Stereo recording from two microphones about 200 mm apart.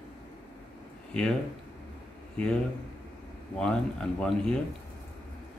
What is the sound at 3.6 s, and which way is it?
Speech, 5° left (ahead or behind).